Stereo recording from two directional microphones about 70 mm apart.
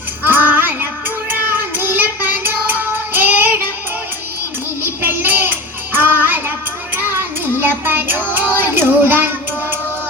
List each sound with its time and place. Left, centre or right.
0.2 s child singing: right
4.8 s child singing: right